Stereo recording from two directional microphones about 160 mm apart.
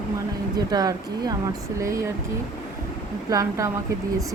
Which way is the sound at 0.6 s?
25° right (ahead or behind).